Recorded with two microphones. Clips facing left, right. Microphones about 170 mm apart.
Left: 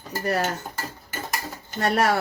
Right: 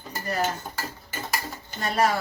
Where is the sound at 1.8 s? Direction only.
70° left (ahead or behind).